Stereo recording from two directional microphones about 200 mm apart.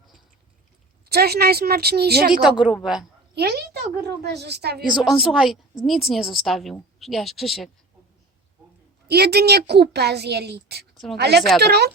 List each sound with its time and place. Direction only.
1.0 s a woman's voice: 50° right (ahead or behind)
2.4 s a woman's voice: 5° right (ahead or behind)
3.3 s a woman's voice: 55° right (ahead or behind)
5.0 s a woman's voice: centre (ahead or behind)
9.0 s a woman's voice: 55° right (ahead or behind)